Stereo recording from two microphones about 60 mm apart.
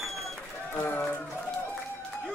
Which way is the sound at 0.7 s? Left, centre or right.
Left.